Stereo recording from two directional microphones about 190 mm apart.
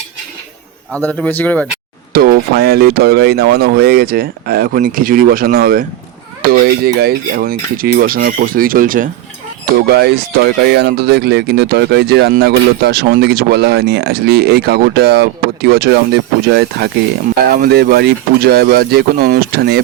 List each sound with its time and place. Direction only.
0.9 s speech: 5° left (ahead or behind)
2.1 s speech: 55° right (ahead or behind)
10.7 s speech: 60° right (ahead or behind)